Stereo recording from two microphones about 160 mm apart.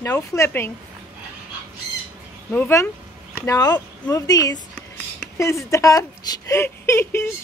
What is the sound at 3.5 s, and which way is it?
Speech, 20° left (ahead or behind).